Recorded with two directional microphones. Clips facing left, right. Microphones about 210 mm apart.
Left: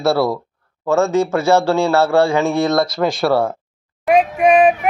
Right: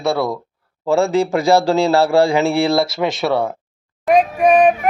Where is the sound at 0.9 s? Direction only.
15° right (ahead or behind).